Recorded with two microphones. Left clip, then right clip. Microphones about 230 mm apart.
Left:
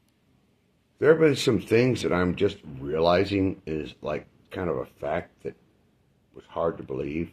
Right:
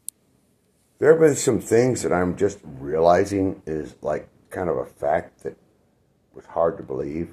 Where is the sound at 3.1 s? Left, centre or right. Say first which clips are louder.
Right 5 dB; centre.